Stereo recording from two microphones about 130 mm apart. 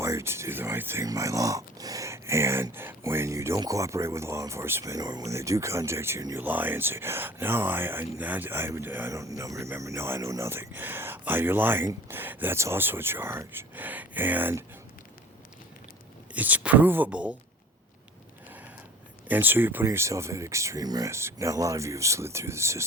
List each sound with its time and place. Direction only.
0.0 s speech: 20° right (ahead or behind)
16.3 s speech: 10° right (ahead or behind)
19.3 s speech: 15° right (ahead or behind)